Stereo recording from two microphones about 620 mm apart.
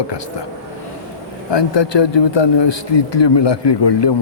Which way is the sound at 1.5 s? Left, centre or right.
Left.